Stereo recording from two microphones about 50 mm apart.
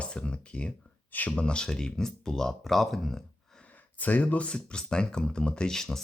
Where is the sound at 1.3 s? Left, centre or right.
Centre.